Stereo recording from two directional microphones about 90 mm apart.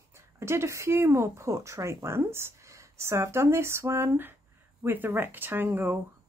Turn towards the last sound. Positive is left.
turn(degrees=-25)  # may be behind; listen again after turning